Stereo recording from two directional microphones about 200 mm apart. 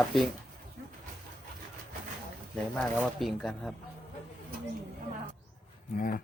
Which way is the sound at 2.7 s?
Centre (ahead or behind).